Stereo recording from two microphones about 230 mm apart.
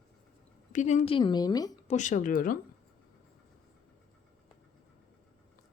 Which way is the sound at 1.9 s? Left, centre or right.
Left.